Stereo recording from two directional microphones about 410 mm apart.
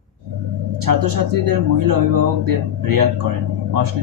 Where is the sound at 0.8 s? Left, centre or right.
Right.